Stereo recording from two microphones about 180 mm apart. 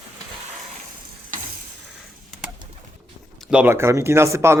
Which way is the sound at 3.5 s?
10° right (ahead or behind).